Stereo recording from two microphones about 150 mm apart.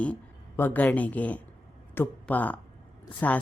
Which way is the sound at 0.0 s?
10° left (ahead or behind).